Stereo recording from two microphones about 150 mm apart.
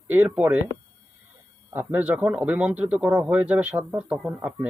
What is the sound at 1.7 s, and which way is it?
Speech, 15° right (ahead or behind).